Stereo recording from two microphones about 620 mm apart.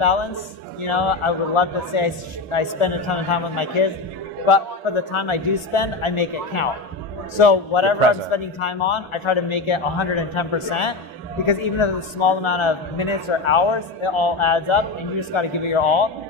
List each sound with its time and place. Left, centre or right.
0.8 s a man's voice: left